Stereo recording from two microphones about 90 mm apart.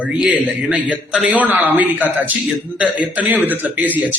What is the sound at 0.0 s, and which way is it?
A man's voice, 15° right (ahead or behind).